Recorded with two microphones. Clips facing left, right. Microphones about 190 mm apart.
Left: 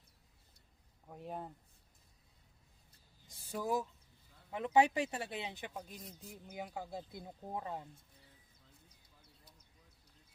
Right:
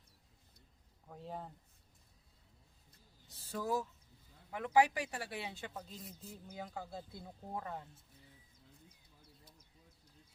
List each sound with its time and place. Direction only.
1.0 s speech: 15° left (ahead or behind)
3.2 s speech: 15° left (ahead or behind)